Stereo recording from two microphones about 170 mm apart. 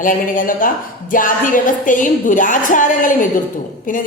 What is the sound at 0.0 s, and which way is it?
A woman's voice, 55° left (ahead or behind).